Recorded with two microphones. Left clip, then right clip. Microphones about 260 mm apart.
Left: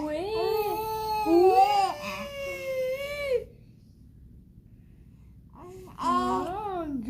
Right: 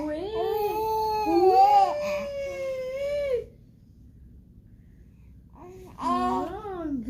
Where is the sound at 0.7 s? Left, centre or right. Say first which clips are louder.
Right 3 dB; centre.